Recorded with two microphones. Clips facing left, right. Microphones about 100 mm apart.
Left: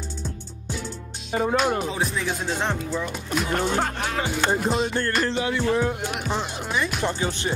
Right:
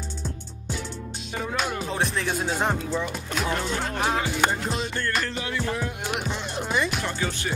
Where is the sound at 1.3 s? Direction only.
40° left (ahead or behind).